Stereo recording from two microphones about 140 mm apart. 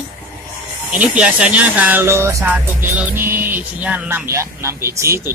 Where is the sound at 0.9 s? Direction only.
10° right (ahead or behind).